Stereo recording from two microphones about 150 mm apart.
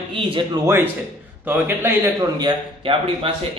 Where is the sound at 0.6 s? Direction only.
15° right (ahead or behind).